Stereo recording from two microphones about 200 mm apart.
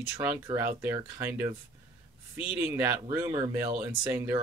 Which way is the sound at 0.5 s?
25° right (ahead or behind).